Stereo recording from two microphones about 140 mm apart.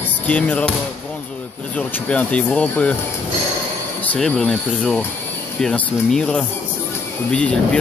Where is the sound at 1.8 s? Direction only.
10° left (ahead or behind).